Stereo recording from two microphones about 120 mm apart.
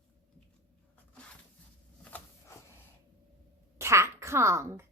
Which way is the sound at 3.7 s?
25° right (ahead or behind).